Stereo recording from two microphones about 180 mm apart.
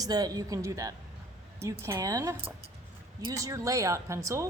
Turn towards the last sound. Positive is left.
turn(degrees=-15)  # may be behind; listen again after turning